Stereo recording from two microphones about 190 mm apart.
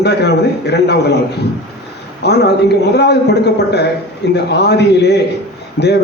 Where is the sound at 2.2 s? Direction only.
60° left (ahead or behind).